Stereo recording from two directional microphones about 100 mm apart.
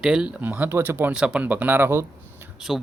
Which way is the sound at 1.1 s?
10° right (ahead or behind).